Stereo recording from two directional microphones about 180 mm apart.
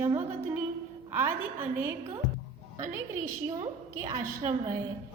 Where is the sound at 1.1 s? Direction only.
10° right (ahead or behind).